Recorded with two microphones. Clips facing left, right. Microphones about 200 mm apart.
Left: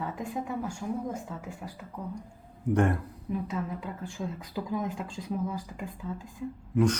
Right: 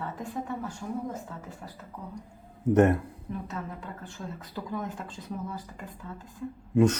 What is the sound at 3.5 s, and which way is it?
A woman's voice, 10° left (ahead or behind).